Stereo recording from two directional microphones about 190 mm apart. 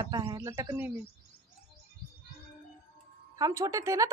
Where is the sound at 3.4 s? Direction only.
20° right (ahead or behind).